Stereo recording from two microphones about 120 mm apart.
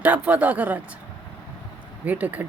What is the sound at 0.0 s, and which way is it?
Speech, 10° right (ahead or behind).